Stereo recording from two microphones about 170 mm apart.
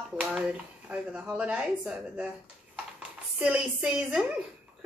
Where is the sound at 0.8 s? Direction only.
10° right (ahead or behind).